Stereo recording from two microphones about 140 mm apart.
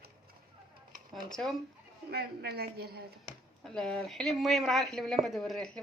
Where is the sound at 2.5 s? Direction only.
90° right.